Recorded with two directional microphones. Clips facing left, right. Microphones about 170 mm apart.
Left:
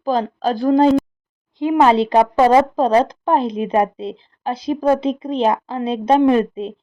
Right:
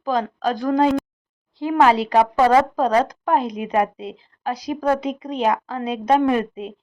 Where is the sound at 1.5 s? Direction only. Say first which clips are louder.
Left 3 dB; 20° left (ahead or behind).